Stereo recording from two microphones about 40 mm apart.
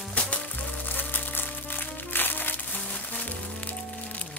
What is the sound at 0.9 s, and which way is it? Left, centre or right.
Music, left.